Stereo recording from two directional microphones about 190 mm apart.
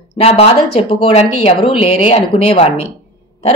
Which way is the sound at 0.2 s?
30° left (ahead or behind).